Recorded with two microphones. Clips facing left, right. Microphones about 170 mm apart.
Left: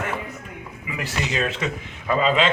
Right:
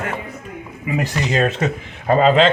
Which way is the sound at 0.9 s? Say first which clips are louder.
Right 7 dB; 45° right (ahead or behind).